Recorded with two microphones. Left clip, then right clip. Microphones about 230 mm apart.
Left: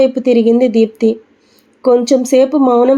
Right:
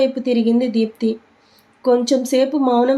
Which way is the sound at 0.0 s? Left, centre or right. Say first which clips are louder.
Left 7 dB; centre.